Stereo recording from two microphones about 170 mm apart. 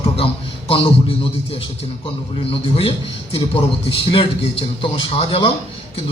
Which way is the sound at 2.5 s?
35° left (ahead or behind).